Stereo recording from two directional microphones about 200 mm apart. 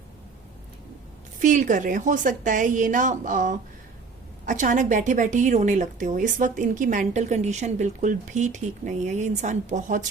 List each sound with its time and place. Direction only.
1.4 s a woman's voice: 40° right (ahead or behind)